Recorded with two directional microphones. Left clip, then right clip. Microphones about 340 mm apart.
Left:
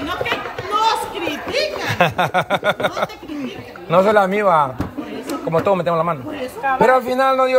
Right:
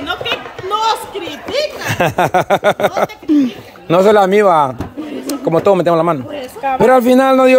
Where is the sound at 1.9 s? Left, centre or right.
Centre.